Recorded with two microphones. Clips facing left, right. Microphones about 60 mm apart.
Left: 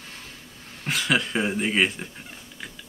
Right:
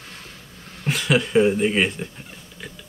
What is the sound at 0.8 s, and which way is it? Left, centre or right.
Speech, centre.